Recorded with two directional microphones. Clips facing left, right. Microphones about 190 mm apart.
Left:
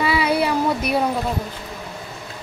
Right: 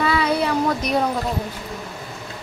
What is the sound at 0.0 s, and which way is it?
Child singing, 10° left (ahead or behind).